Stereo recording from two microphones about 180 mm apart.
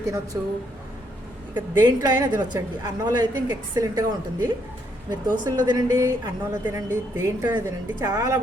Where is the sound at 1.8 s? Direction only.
20° right (ahead or behind).